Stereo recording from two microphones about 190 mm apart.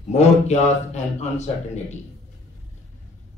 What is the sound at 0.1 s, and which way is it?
A man's voice, 35° left (ahead or behind).